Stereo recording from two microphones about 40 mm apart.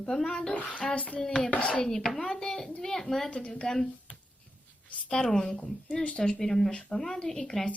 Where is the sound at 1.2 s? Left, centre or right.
Left.